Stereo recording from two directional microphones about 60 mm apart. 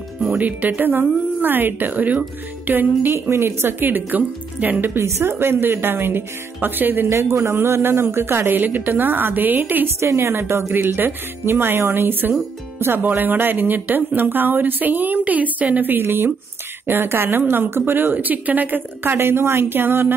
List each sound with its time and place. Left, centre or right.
0.3 s speech: right
7.1 s speech: right
9.9 s a woman's voice: right
10.7 s speech: right